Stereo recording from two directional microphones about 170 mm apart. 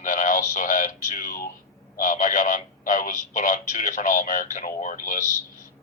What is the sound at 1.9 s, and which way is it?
Speech, 50° left (ahead or behind).